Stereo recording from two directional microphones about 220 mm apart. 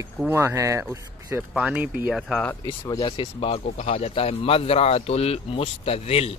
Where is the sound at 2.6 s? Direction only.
15° left (ahead or behind).